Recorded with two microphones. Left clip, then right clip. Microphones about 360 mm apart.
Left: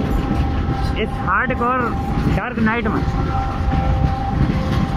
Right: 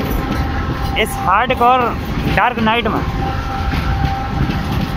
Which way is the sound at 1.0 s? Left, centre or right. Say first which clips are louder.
Right 5 dB; centre.